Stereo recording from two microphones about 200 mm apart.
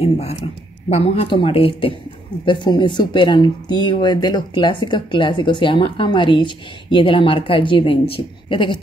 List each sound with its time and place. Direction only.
0.0 s speech: 30° left (ahead or behind)